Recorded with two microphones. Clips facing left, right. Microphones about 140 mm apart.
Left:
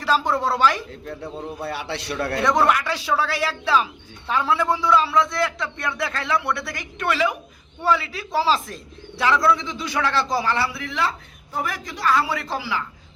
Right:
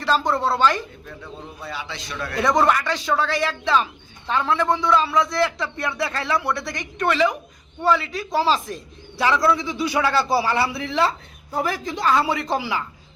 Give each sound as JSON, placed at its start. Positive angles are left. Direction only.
{"t": 0.0, "sound": "a woman's voice", "side_deg": 10}
{"t": 1.6, "sound": "a man's voice", "side_deg": 65}
{"t": 2.4, "sound": "a man's voice", "side_deg": 0}
{"t": 10.7, "sound": "speech", "side_deg": -25}